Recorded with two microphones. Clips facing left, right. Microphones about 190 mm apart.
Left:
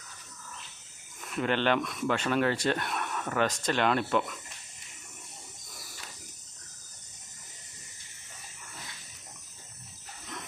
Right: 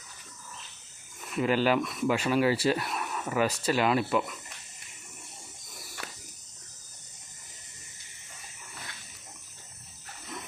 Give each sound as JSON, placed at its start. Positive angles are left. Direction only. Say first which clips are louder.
{"t": 1.2, "sound": "speech", "louder": "right 2 dB", "side_deg": -5}
{"t": 6.0, "sound": "cricket", "louder": "right 8 dB", "side_deg": -65}